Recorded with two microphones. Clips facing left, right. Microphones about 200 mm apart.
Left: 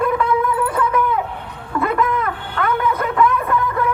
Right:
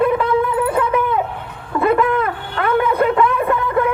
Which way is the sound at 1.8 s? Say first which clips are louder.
Right 4 dB; 30° right (ahead or behind).